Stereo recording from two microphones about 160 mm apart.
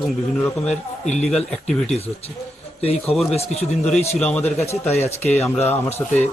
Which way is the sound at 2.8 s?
40° left (ahead or behind).